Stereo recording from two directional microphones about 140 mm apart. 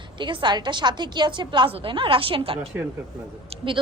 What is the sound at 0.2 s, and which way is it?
A woman's voice, 35° right (ahead or behind).